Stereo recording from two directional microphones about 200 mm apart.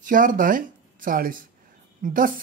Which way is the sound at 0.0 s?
45° right (ahead or behind).